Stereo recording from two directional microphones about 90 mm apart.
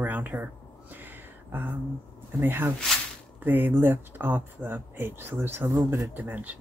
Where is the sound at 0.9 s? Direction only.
20° right (ahead or behind).